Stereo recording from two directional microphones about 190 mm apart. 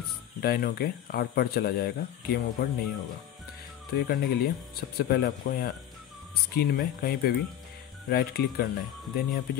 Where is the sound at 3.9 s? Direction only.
55° left (ahead or behind).